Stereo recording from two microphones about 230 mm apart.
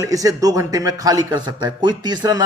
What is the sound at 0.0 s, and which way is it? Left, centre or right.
A man's voice, centre.